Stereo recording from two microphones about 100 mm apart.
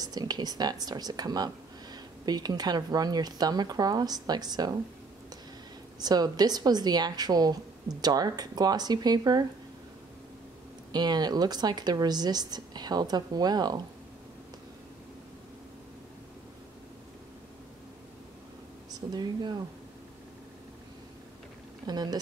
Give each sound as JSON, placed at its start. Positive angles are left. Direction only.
{"t": 0.0, "sound": "speech", "side_deg": -40}
{"t": 5.9, "sound": "speech", "side_deg": -40}
{"t": 10.9, "sound": "speech", "side_deg": -45}
{"t": 18.9, "sound": "speech", "side_deg": -45}
{"t": 21.8, "sound": "speech", "side_deg": -45}